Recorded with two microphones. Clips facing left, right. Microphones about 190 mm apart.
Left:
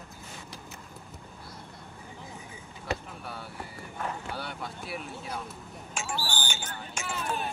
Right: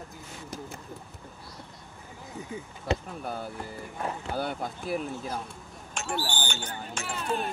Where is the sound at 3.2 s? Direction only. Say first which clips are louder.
Right 5 dB; 45° right (ahead or behind).